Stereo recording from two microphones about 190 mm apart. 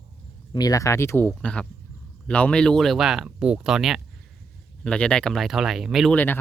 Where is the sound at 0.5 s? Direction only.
20° left (ahead or behind).